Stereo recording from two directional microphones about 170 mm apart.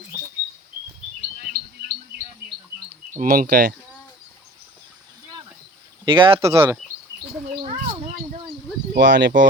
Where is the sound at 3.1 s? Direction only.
50° right (ahead or behind).